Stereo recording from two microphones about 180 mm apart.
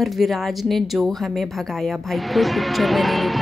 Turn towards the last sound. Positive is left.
turn(degrees=0)  # may be behind; listen again after turning